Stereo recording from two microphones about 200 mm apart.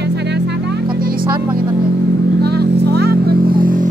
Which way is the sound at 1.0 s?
45° right (ahead or behind).